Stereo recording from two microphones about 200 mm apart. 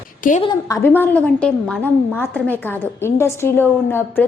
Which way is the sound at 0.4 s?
15° left (ahead or behind).